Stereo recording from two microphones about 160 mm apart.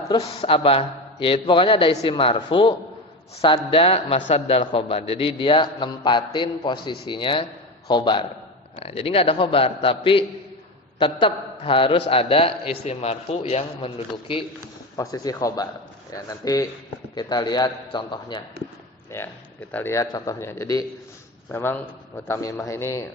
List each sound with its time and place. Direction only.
0.1 s a man's voice: 35° left (ahead or behind)
8.7 s a man's voice: 40° left (ahead or behind)
14.9 s a man's voice: 20° left (ahead or behind)
19.1 s a man's voice: 15° left (ahead or behind)